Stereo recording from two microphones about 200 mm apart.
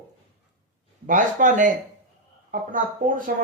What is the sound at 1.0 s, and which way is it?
Speech, 40° right (ahead or behind).